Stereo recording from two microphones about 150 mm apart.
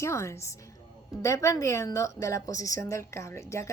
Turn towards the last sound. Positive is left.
turn(degrees=20)  # may be behind; listen again after turning